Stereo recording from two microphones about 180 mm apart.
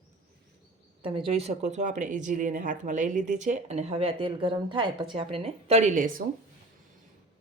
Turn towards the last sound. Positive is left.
turn(degrees=-45)  # may be behind; listen again after turning